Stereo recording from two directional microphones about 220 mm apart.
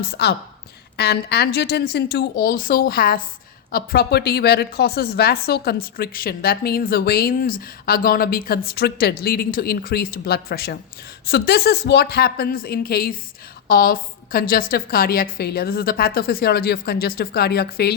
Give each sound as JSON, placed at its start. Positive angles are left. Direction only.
{"t": 0.1, "sound": "speech", "side_deg": 50}